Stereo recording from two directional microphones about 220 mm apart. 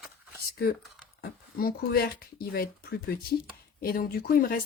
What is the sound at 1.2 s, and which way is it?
Speech, 45° left (ahead or behind).